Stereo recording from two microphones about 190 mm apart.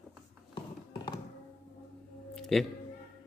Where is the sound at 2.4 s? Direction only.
Centre (ahead or behind).